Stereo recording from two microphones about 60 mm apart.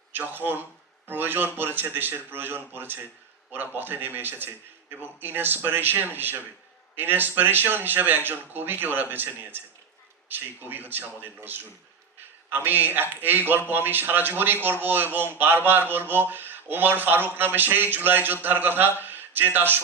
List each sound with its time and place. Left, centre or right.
0.1 s a man's voice: right